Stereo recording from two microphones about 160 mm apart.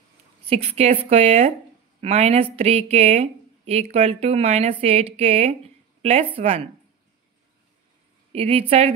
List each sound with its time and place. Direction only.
0.5 s speech: 40° right (ahead or behind)
8.3 s speech: 40° right (ahead or behind)